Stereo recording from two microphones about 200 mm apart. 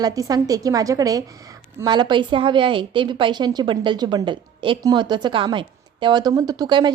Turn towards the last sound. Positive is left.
turn(degrees=-20)  # may be behind; listen again after turning